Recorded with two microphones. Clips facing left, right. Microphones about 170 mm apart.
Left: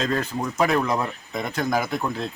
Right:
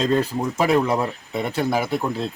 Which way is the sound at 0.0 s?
30° right (ahead or behind).